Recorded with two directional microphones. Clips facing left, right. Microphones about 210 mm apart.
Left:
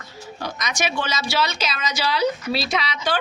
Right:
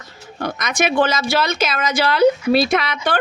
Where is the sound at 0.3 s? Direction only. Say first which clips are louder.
Right 6 dB; 55° right (ahead or behind).